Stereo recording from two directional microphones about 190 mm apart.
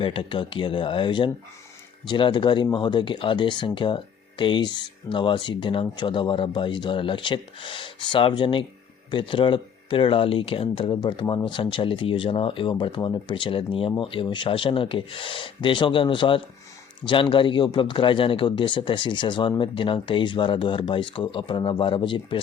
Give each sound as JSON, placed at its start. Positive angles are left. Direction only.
{"t": 0.0, "sound": "speech", "side_deg": 25}